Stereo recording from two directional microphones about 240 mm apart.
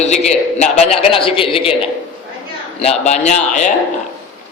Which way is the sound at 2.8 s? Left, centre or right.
Left.